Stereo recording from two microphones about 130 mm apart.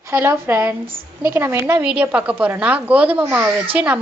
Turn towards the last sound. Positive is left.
turn(degrees=-10)  # may be behind; listen again after turning